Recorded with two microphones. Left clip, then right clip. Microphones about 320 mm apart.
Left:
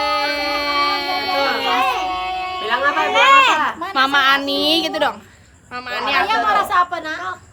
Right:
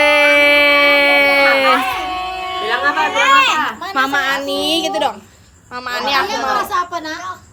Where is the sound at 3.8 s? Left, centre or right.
Centre.